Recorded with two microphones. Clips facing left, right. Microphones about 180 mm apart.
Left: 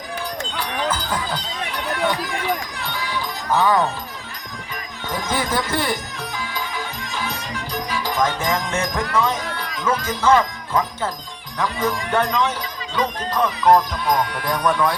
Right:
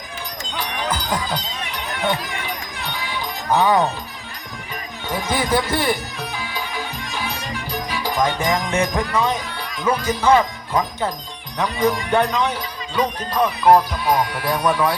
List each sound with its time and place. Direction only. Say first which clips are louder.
0.5 s a sound: right 1 dB; 15° right (ahead or behind)
2.7 s music: left 1 dB; 20° right (ahead or behind)
5.0 s music: right 2 dB; 10° right (ahead or behind)
9.8 s speech: right 1 dB; 15° right (ahead or behind)